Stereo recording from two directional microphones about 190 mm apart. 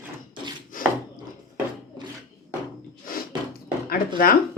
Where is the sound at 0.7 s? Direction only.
45° left (ahead or behind).